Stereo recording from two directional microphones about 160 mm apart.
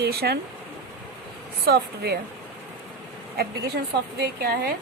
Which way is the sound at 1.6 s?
85° right.